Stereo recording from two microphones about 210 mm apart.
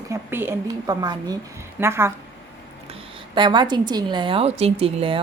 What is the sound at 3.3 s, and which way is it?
A woman's voice, 20° right (ahead or behind).